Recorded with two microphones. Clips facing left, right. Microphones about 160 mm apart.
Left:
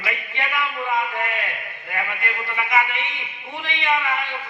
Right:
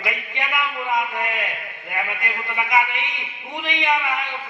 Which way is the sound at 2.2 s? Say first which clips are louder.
Even; 15° right (ahead or behind).